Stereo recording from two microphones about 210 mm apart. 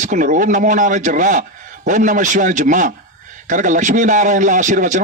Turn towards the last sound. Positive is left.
turn(degrees=-35)  # may be behind; listen again after turning